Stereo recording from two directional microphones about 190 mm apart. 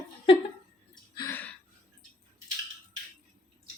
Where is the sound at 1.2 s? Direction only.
10° left (ahead or behind).